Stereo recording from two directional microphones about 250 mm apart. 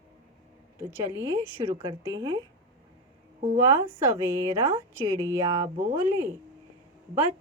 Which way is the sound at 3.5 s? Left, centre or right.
Centre.